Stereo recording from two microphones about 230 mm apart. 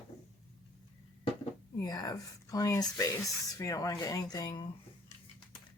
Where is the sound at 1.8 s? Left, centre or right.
Centre.